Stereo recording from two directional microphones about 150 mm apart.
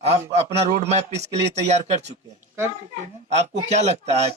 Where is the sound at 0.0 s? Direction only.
45° right (ahead or behind).